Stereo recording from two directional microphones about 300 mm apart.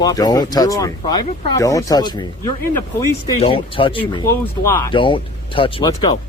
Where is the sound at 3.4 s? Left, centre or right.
Centre.